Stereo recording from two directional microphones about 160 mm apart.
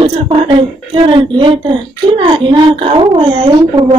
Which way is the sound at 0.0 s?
35° right (ahead or behind).